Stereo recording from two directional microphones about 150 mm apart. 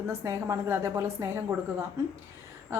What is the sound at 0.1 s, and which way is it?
A woman's voice, 20° right (ahead or behind).